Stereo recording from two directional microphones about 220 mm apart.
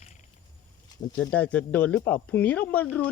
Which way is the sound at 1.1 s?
5° left (ahead or behind).